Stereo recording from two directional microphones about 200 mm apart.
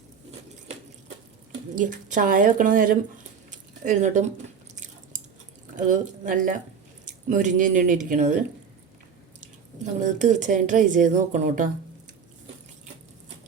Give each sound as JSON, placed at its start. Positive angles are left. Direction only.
{"t": 1.7, "sound": "speech", "side_deg": -40}
{"t": 3.5, "sound": "a sound", "side_deg": -40}
{"t": 5.7, "sound": "speech", "side_deg": -40}
{"t": 10.0, "sound": "speech", "side_deg": -35}